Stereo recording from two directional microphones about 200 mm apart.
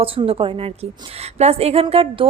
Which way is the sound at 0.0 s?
25° right (ahead or behind).